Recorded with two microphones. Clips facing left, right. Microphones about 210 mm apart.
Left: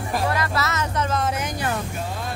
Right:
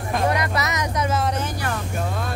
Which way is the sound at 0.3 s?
20° right (ahead or behind).